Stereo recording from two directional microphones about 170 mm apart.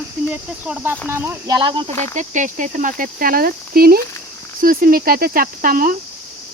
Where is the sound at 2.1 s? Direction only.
45° right (ahead or behind).